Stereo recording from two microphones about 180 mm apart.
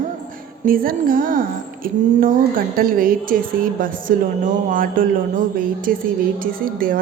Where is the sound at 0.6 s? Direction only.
50° right (ahead or behind).